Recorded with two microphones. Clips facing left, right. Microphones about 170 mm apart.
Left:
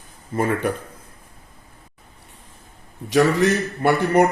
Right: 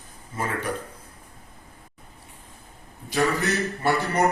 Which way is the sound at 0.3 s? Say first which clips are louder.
Left 8 dB; 55° left (ahead or behind).